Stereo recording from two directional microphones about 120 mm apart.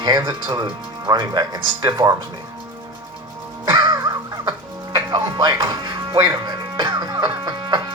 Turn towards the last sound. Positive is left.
turn(degrees=-40)  # may be behind; listen again after turning